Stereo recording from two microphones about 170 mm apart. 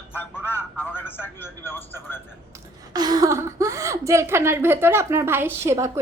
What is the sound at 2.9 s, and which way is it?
A woman's voice, 25° right (ahead or behind).